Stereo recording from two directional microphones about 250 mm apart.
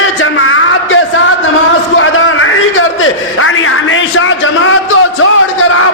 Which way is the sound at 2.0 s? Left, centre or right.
Left.